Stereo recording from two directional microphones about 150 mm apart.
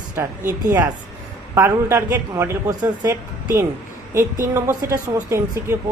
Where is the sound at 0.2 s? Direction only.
15° right (ahead or behind).